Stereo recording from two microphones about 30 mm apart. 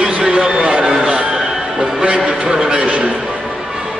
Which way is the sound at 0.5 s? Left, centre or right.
Right.